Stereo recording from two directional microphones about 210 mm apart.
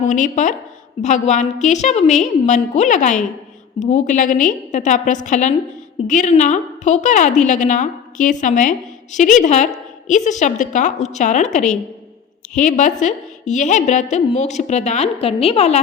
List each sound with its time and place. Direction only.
0.0 s a woman's voice: 35° left (ahead or behind)